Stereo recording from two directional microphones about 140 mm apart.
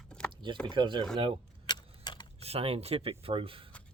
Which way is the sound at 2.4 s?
45° right (ahead or behind).